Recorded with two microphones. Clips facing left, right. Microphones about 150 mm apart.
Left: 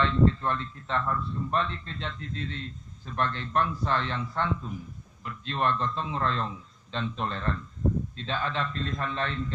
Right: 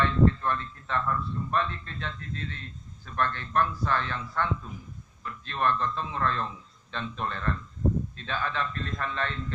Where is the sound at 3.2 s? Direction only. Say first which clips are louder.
Right 1 dB; 20° left (ahead or behind).